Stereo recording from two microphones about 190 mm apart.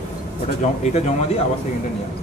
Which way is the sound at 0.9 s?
35° left (ahead or behind).